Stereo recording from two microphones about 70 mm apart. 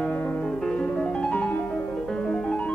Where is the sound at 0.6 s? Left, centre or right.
Centre.